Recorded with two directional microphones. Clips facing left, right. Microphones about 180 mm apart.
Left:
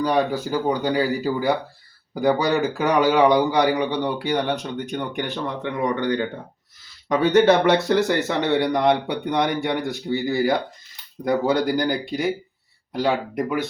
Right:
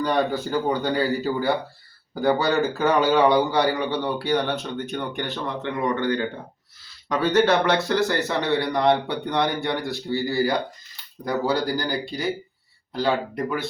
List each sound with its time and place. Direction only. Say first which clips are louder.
0.0 s speech: left 2 dB; 10° left (ahead or behind)
7.3 s speech: left 3 dB; 20° left (ahead or behind)